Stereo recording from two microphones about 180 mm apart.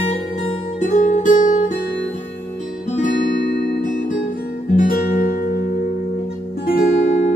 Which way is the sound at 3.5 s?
70° left (ahead or behind).